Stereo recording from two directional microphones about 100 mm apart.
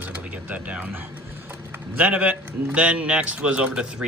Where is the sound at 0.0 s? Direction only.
15° right (ahead or behind).